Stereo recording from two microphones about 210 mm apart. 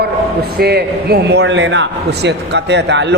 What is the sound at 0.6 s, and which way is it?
A man's voice, 50° right (ahead or behind).